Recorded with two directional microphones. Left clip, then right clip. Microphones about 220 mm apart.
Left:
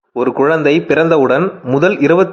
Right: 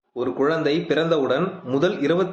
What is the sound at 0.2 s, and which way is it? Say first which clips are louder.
A man's voice: left 9 dB; 35° left (ahead or behind).